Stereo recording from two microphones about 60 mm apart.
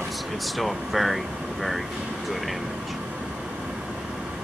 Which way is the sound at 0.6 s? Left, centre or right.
Centre.